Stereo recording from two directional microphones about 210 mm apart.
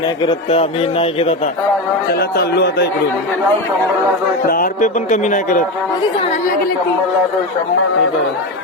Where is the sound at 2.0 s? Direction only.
50° left (ahead or behind).